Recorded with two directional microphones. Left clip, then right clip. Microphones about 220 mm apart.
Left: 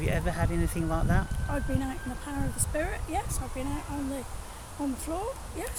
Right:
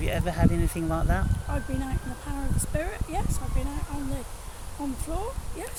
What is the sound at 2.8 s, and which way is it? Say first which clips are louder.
Speech: left 1 dB; 10° left (ahead or behind).